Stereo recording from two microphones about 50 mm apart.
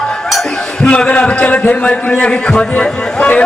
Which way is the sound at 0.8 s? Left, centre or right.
Left.